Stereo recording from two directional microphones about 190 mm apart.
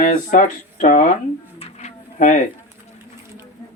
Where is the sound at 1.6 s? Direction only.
35° left (ahead or behind).